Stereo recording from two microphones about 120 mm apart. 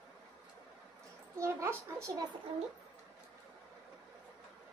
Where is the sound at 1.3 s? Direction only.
20° right (ahead or behind).